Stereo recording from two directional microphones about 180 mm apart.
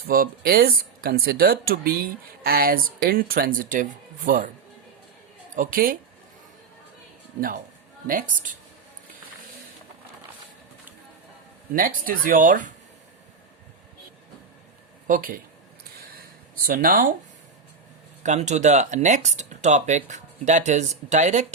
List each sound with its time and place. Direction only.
0.1 s speech: 55° right (ahead or behind)
5.5 s speech: 50° right (ahead or behind)
8.0 s speech: 50° right (ahead or behind)
11.7 s speech: 50° right (ahead or behind)
15.0 s speech: 50° right (ahead or behind)
16.1 s a sound: 55° right (ahead or behind)
18.2 s speech: 40° right (ahead or behind)